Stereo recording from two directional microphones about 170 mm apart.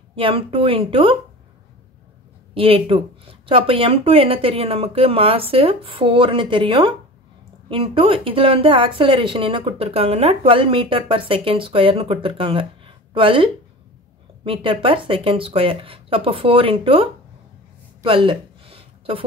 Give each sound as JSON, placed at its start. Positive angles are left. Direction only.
{"t": 0.1, "sound": "speech", "side_deg": -30}
{"t": 2.5, "sound": "speech", "side_deg": -30}
{"t": 18.0, "sound": "a sound", "side_deg": -30}